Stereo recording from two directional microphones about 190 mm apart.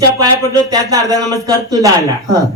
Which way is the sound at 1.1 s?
20° right (ahead or behind).